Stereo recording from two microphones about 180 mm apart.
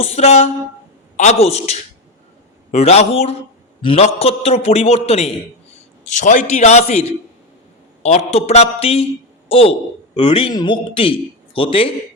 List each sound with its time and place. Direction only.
0.0 s a man's voice: 35° left (ahead or behind)